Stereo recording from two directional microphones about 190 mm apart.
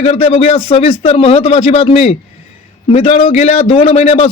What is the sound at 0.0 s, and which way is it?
A man's voice, 30° left (ahead or behind).